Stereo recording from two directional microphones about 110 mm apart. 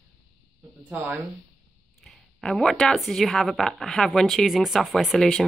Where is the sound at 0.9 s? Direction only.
15° right (ahead or behind).